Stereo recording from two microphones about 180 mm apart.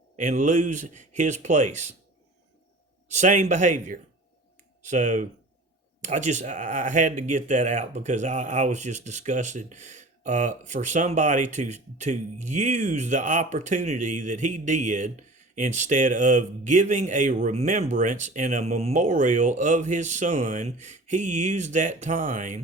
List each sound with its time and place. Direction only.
0.2 s speech: 45° right (ahead or behind)
3.1 s speech: 40° right (ahead or behind)